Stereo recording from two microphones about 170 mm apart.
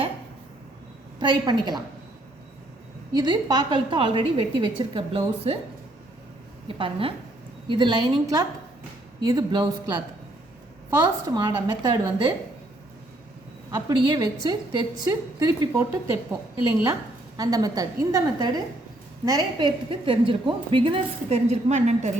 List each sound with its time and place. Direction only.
1.2 s a woman's voice: 25° right (ahead or behind)
3.1 s a woman's voice: 25° right (ahead or behind)
6.7 s a woman's voice: 30° right (ahead or behind)
11.3 s a woman's voice: 25° right (ahead or behind)
13.7 s a woman's voice: 25° right (ahead or behind); by 22.1 s 40° right (ahead or behind)